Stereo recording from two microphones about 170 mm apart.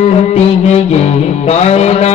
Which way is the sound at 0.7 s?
40° left (ahead or behind).